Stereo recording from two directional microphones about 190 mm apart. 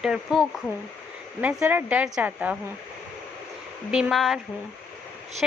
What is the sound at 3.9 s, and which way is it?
Speech, centre (ahead or behind).